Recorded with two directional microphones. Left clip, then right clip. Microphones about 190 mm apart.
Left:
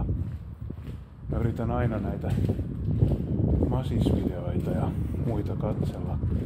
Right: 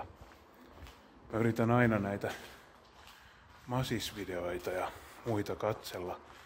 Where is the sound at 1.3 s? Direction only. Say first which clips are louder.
Even; 20° right (ahead or behind).